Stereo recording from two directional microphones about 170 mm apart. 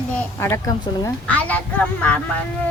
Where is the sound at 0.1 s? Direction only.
10° left (ahead or behind).